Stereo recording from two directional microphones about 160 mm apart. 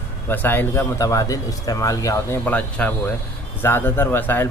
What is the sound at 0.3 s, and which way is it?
Speech, 15° left (ahead or behind).